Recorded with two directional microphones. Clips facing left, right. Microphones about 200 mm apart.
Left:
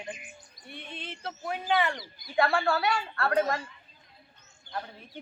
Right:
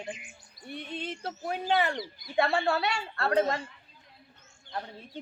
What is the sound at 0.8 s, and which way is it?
A woman's voice, 40° right (ahead or behind).